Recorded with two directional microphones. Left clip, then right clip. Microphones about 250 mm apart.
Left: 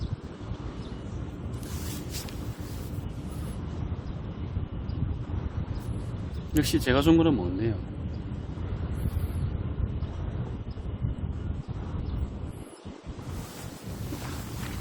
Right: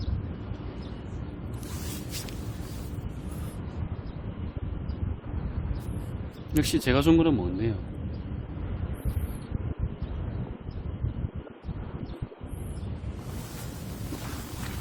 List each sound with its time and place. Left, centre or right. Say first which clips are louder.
6.5 s a man's voice: even; centre